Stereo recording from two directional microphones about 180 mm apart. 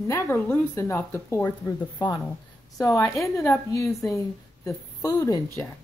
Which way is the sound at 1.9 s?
25° left (ahead or behind).